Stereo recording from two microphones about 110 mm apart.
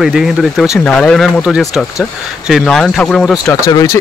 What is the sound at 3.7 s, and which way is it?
Speech, 25° left (ahead or behind).